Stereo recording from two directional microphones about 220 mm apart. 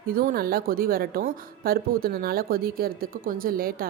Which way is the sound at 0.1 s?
40° right (ahead or behind).